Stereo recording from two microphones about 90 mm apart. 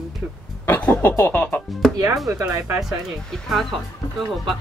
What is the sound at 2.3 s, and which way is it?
Speech, 35° right (ahead or behind).